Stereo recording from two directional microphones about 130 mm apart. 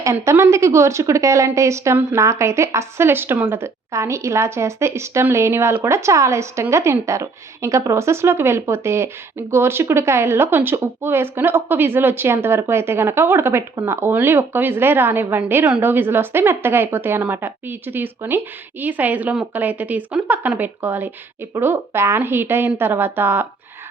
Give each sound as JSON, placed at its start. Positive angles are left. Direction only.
{"t": 0.0, "sound": "a woman's voice", "side_deg": -20}